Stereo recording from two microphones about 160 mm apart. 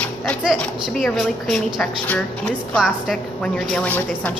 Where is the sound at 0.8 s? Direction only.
Centre (ahead or behind).